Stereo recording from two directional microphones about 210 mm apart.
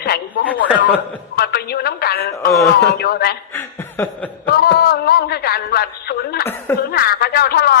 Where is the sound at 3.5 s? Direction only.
10° left (ahead or behind).